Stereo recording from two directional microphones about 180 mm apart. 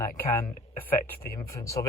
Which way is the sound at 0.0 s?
15° left (ahead or behind).